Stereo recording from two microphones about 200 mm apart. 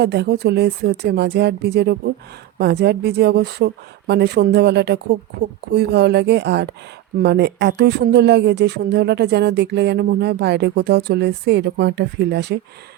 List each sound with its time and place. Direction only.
0.0 s speech: 55° right (ahead or behind)